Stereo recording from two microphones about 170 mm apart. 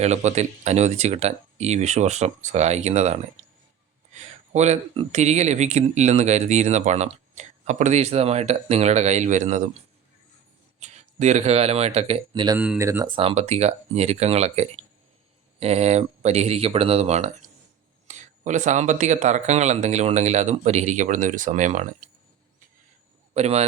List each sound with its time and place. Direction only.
0.0 s speech: 40° right (ahead or behind)
3.4 s a sound: 35° right (ahead or behind)
4.5 s speech: 40° right (ahead or behind)
10.8 s speech: 45° right (ahead or behind)
12.3 s speech: 25° right (ahead or behind)
12.5 s speech: 10° right (ahead or behind)
13.1 s speech: 35° right (ahead or behind)
23.3 s speech: 40° right (ahead or behind)